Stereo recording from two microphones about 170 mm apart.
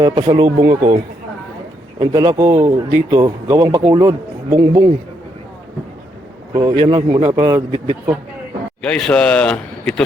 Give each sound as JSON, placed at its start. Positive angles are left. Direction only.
{"t": 0.0, "sound": "speech", "side_deg": -30}
{"t": 2.0, "sound": "speech", "side_deg": -25}
{"t": 6.5, "sound": "speech", "side_deg": -25}
{"t": 8.8, "sound": "speech", "side_deg": 5}